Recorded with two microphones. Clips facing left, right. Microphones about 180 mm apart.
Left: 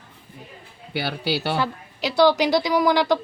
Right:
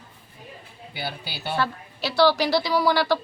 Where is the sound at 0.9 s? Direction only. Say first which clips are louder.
Left 9 dB; 75° left (ahead or behind).